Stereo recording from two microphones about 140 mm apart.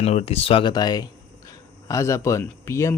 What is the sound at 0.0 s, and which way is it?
Speech, 50° left (ahead or behind).